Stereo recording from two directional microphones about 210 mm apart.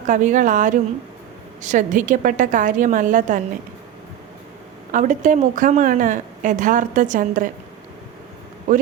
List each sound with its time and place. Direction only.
0.1 s a woman's voice: 35° right (ahead or behind)
4.9 s a woman's voice: 35° right (ahead or behind)